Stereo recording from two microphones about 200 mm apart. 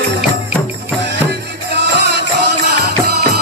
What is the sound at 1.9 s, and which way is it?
Music, 55° right (ahead or behind).